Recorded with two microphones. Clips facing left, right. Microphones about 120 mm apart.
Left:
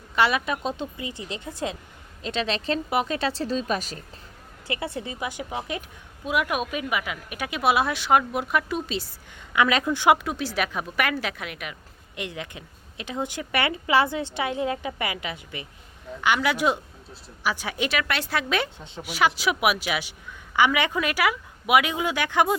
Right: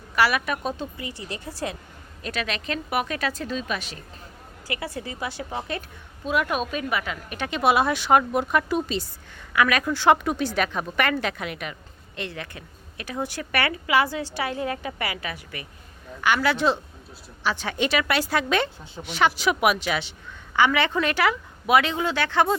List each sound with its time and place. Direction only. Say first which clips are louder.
0.2 s a woman's voice: even; 20° left (ahead or behind); by 4.0 s 40° left (ahead or behind)
4.7 s a woman's voice: left 1 dB; 25° left (ahead or behind); by 9.0 s centre (ahead or behind)
9.5 s a woman's voice: even; 20° left (ahead or behind)
10.2 s speech: right 3 dB; centre (ahead or behind)
12.1 s a woman's voice: even; 15° left (ahead or behind)